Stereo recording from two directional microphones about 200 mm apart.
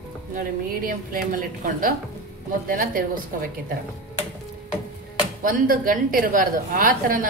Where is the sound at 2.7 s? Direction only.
45° right (ahead or behind).